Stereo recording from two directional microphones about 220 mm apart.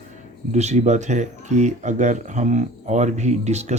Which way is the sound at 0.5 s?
30° right (ahead or behind).